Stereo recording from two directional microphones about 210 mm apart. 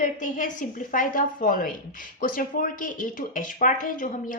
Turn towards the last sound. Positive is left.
turn(degrees=40)  # may be behind; listen again after turning